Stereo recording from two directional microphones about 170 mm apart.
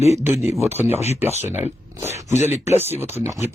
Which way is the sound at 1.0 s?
40° left (ahead or behind).